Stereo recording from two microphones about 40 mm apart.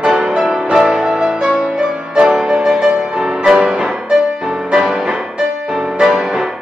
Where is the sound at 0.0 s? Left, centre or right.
Centre.